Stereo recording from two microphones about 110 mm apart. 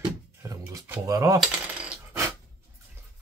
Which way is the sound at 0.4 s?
25° right (ahead or behind).